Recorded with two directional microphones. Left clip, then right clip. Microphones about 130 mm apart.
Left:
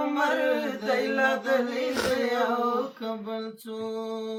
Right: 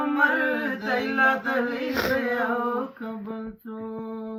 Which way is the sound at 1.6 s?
35° left (ahead or behind).